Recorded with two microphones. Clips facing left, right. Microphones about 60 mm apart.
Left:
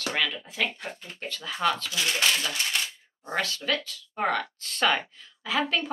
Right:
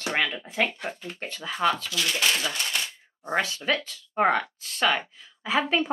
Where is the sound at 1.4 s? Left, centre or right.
Centre.